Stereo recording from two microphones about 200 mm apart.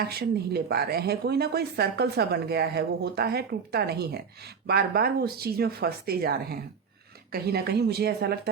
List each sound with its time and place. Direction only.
0.1 s a woman's voice: 50° right (ahead or behind)